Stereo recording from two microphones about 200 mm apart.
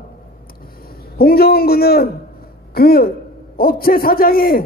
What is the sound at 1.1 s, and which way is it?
A man's voice, 50° left (ahead or behind).